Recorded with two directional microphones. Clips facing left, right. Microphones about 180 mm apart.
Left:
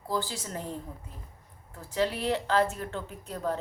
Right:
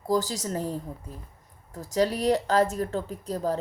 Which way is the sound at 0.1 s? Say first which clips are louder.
Right 7 dB; 40° right (ahead or behind).